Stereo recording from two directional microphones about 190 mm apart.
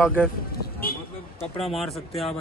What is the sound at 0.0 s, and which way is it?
Speech, 10° left (ahead or behind).